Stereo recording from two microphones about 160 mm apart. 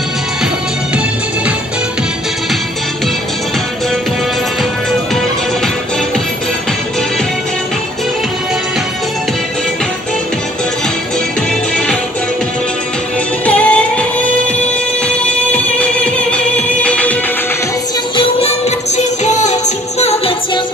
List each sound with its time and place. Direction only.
13.5 s music: 10° left (ahead or behind)
15.2 s music: 5° left (ahead or behind)
18.9 s music: 50° left (ahead or behind)